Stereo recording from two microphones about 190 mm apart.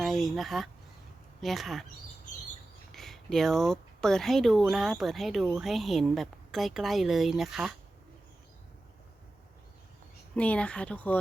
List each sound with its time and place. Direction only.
0.0 s a sound: centre (ahead or behind)
1.4 s speech: centre (ahead or behind)
2.9 s speech: centre (ahead or behind)
10.3 s speech: 5° left (ahead or behind)